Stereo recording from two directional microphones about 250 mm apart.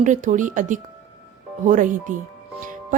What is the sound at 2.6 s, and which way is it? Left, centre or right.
Music, right.